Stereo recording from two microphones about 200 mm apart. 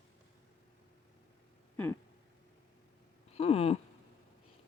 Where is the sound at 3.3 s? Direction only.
30° left (ahead or behind).